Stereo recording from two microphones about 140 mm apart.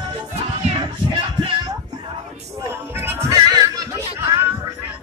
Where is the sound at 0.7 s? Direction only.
40° right (ahead or behind).